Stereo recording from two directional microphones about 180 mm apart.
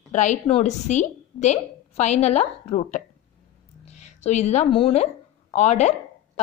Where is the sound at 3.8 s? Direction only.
40° left (ahead or behind).